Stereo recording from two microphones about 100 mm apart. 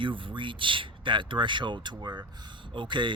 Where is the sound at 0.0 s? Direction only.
55° right (ahead or behind).